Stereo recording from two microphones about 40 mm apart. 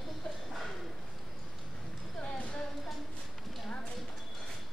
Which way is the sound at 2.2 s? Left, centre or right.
Left.